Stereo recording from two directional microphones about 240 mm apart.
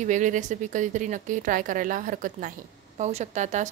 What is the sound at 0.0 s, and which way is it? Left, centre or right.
Speech, right.